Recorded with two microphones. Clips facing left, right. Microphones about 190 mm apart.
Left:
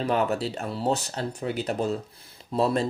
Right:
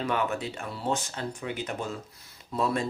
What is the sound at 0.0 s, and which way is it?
Speech, 35° left (ahead or behind).